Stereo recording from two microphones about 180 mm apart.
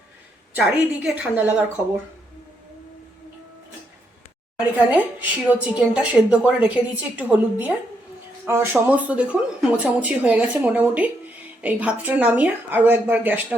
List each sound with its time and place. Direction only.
0.5 s a woman's voice: 5° right (ahead or behind)
4.8 s a woman's voice: 10° right (ahead or behind)